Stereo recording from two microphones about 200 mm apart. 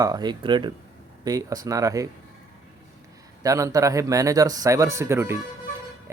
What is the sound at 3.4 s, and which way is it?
Speech, 15° right (ahead or behind).